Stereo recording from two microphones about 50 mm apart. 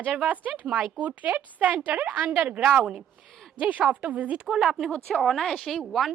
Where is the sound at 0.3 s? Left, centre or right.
Right.